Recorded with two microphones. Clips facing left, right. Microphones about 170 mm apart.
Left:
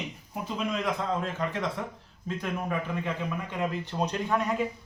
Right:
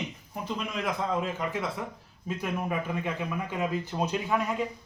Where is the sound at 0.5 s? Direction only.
5° right (ahead or behind).